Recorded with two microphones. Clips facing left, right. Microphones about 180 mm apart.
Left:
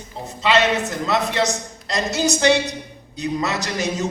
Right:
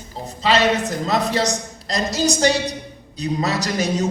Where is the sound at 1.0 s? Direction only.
35° right (ahead or behind).